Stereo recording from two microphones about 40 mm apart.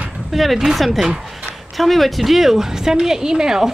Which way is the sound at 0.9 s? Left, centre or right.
Centre.